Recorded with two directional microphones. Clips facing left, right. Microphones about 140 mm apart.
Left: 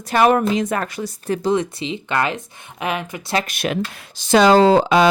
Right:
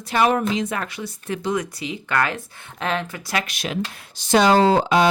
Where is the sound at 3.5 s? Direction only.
55° left (ahead or behind).